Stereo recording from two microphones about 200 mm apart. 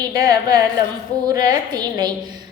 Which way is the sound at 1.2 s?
20° right (ahead or behind).